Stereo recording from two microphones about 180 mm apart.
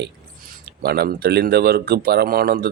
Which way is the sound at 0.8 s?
60° right (ahead or behind).